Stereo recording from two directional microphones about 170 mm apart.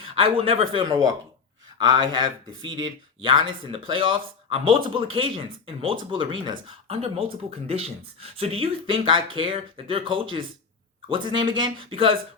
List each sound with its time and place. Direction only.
0.0 s speech: 35° right (ahead or behind)